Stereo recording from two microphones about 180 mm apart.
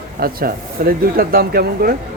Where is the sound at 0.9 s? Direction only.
55° right (ahead or behind).